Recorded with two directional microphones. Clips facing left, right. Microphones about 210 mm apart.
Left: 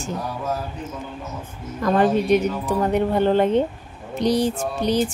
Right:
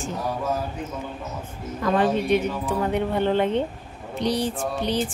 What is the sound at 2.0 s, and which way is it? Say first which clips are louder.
Speech: left 3 dB; 40° left (ahead or behind).